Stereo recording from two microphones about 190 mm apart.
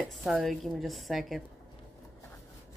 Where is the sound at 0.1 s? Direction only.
Centre (ahead or behind).